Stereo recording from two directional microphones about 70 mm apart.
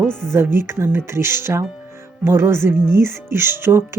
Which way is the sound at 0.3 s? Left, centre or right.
Right.